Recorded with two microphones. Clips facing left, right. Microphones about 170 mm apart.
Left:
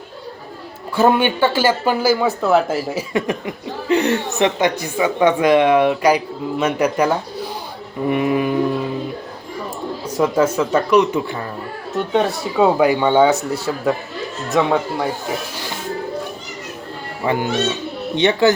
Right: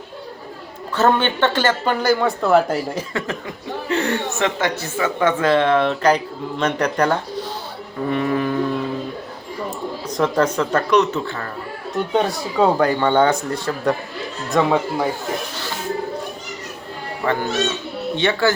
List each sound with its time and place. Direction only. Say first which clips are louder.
0.9 s speech: left 2 dB; 10° left (ahead or behind)
3.1 s speech: left 5 dB; 15° left (ahead or behind)
12.1 s speech: left 2 dB; centre (ahead or behind)
17.2 s speech: left 2 dB; 15° left (ahead or behind)